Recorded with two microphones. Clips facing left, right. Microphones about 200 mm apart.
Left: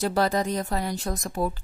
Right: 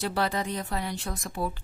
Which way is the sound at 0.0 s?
40° left (ahead or behind).